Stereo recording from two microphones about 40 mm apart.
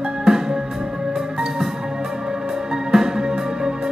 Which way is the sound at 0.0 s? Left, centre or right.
Centre.